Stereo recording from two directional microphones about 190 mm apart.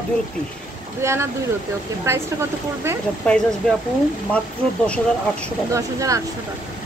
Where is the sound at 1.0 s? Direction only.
15° right (ahead or behind).